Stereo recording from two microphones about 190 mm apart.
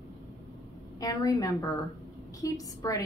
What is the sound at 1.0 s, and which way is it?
A woman's voice, 20° left (ahead or behind).